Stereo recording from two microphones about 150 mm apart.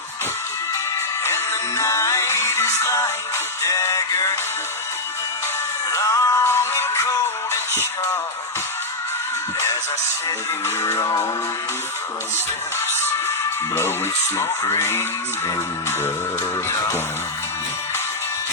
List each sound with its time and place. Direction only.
1.2 s music: 20° left (ahead or behind)
5.9 s music: 20° left (ahead or behind)
10.8 s music: 20° left (ahead or behind)
14.3 s music: 20° left (ahead or behind)